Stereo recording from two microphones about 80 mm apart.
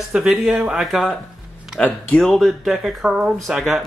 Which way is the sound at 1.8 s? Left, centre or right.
Centre.